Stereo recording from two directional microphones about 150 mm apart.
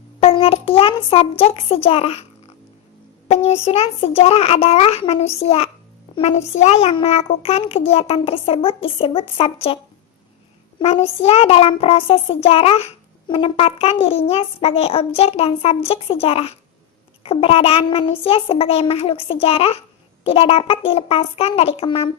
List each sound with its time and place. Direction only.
0.2 s child singing: 40° left (ahead or behind)
3.2 s a child's voice: 45° left (ahead or behind)
6.1 s child singing: 45° left (ahead or behind)
10.8 s child singing: 40° left (ahead or behind)